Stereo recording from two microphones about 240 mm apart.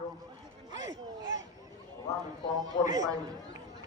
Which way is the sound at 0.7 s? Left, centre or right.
Left.